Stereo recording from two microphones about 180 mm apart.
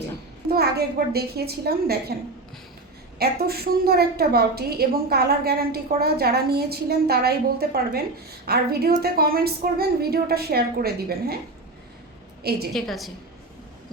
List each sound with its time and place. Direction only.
0.5 s a woman's voice: 60° right (ahead or behind)
3.2 s a woman's voice: 60° right (ahead or behind)
12.4 s a woman's voice: 60° right (ahead or behind)
12.7 s a woman's voice: centre (ahead or behind)